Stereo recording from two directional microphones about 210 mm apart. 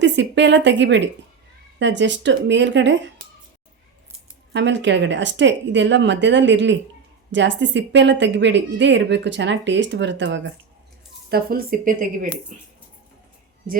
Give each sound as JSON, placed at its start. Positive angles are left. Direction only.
{"t": 0.0, "sound": "a woman's voice", "side_deg": -55}
{"t": 4.5, "sound": "a woman's voice", "side_deg": -60}
{"t": 11.3, "sound": "speech", "side_deg": -45}